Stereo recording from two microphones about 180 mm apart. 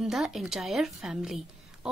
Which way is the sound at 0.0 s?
Centre (ahead or behind).